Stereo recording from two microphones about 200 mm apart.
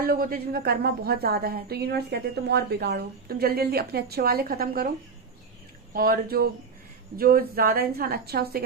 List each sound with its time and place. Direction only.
0.0 s a woman's voice: 50° right (ahead or behind)
5.9 s a woman's voice: 50° right (ahead or behind)